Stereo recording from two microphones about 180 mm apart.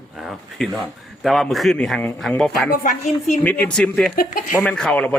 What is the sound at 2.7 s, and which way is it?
Speech, 45° left (ahead or behind).